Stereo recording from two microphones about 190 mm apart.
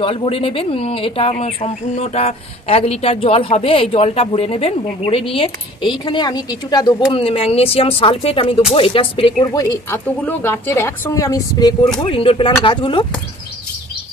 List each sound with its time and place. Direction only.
0.0 s a woman's voice: 30° left (ahead or behind)
12.0 s a woman's voice: 30° left (ahead or behind)